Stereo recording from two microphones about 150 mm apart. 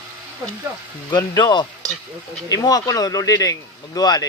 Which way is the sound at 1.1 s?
25° left (ahead or behind).